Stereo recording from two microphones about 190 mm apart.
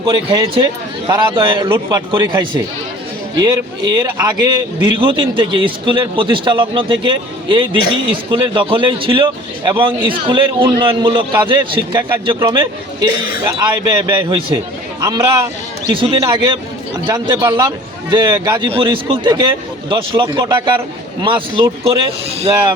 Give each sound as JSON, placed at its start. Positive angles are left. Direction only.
{"t": 0.1, "sound": "a man's voice", "side_deg": -25}
{"t": 18.1, "sound": "a man's voice", "side_deg": -25}